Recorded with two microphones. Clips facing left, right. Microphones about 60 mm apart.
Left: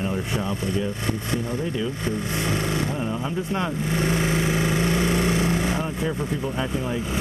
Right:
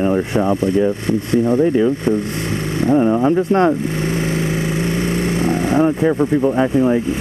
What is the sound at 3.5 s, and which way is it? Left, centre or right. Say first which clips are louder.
Vehicle: right 9 dB; right.